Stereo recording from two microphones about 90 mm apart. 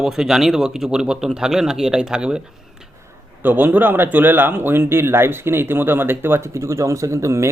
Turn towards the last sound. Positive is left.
turn(degrees=-35)  # may be behind; listen again after turning